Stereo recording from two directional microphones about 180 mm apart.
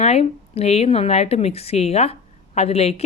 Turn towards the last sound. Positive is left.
turn(degrees=35)  # may be behind; listen again after turning